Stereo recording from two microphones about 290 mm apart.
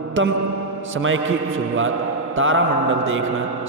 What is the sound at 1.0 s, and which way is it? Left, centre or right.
Speech, right.